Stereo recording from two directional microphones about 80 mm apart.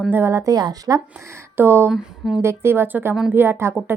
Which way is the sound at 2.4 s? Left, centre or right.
Right.